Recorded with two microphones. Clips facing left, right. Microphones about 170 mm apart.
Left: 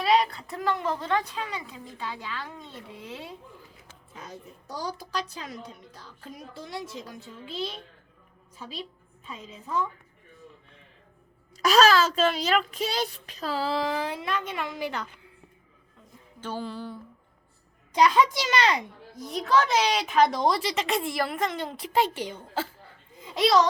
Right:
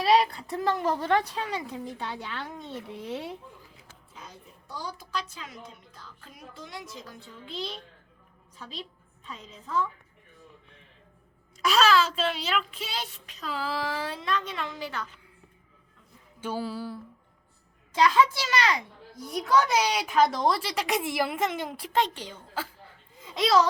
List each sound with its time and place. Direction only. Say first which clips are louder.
0.0 s a woman's voice: right 1 dB; 30° right (ahead or behind)
4.1 s a woman's voice: left 5 dB; 50° left (ahead or behind)
7.4 s a woman's voice: left 2 dB; 5° left (ahead or behind)
11.5 s a woman's voice: left 3 dB; 40° left (ahead or behind); by 15.1 s 15° left (ahead or behind)
16.4 s a woman's voice: right 2 dB; 10° right (ahead or behind)
17.9 s a child's voice: left 1 dB; 15° left (ahead or behind)
19.3 s a woman's voice: even; 5° right (ahead or behind)
21.2 s a woman's voice: even; 15° right (ahead or behind)
21.9 s a woman's voice: left 2 dB; 10° left (ahead or behind)
23.4 s a woman's voice: left 1 dB; centre (ahead or behind)